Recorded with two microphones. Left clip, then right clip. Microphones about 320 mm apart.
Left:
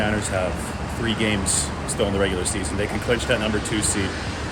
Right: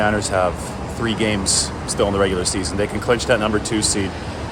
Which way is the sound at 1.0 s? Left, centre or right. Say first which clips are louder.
Right 3 dB; centre.